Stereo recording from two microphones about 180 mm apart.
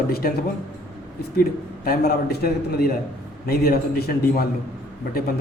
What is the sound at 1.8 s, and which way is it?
A man's voice, 55° left (ahead or behind).